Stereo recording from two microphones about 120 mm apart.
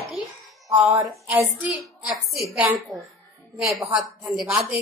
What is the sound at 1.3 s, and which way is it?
Speech, 20° right (ahead or behind).